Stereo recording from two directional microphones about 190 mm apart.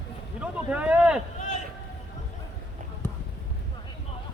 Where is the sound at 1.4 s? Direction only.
40° left (ahead or behind).